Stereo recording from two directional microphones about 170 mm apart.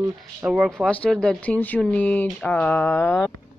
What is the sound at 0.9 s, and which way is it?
Speech, 5° left (ahead or behind).